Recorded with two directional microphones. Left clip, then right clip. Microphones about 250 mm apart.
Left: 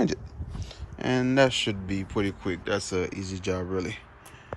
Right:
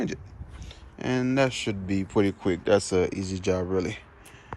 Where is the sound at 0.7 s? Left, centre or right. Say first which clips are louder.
Left 1 dB; centre.